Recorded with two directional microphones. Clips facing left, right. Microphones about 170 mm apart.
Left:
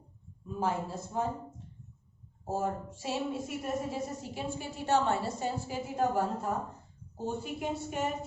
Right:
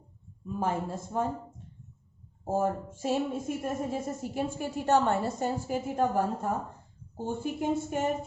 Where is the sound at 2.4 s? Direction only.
50° right (ahead or behind).